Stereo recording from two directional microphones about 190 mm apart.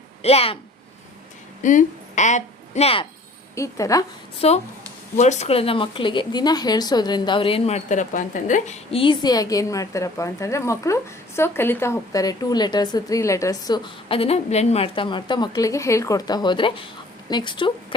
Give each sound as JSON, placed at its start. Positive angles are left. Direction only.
{"t": 0.2, "sound": "speech", "side_deg": 30}
{"t": 1.6, "sound": "a woman's voice", "side_deg": 40}
{"t": 3.5, "sound": "a woman's voice", "side_deg": 15}
{"t": 4.4, "sound": "a woman's voice", "side_deg": 35}